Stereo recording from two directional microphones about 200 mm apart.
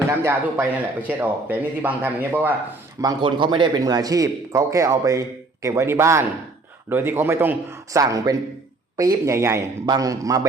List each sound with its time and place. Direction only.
0.2 s speech: 10° right (ahead or behind)
3.0 s speech: 20° right (ahead or behind)